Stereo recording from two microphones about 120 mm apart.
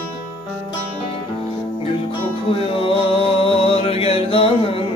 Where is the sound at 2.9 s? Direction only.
50° left (ahead or behind).